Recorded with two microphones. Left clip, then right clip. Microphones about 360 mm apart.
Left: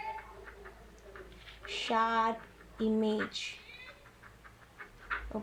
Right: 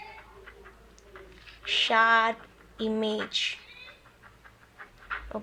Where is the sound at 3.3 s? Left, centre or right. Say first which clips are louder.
Right 11 dB; right.